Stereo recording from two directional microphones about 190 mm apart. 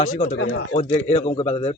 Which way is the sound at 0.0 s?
40° left (ahead or behind).